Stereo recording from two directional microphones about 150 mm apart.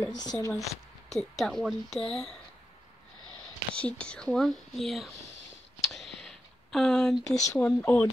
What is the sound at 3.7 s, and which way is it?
A woman's voice, 5° left (ahead or behind).